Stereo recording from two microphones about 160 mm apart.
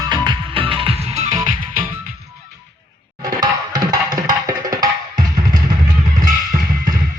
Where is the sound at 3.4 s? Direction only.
25° right (ahead or behind).